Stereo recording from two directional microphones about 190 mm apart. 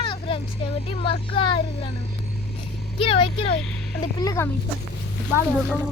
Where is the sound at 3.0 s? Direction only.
30° left (ahead or behind).